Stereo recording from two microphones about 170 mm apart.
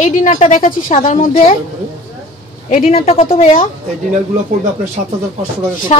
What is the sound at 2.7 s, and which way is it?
Speech, 45° left (ahead or behind).